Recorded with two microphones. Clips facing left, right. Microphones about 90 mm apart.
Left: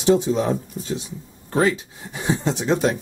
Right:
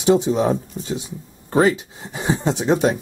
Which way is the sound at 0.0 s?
15° right (ahead or behind).